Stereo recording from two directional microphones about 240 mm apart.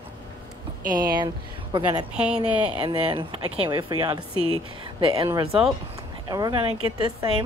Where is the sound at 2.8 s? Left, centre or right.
Right.